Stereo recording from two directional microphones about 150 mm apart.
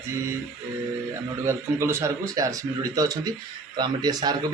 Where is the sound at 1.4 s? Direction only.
20° right (ahead or behind).